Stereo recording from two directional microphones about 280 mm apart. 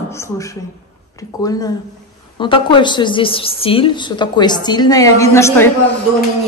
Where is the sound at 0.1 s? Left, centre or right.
Centre.